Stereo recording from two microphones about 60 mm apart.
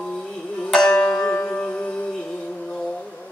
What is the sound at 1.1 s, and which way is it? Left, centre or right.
Music, left.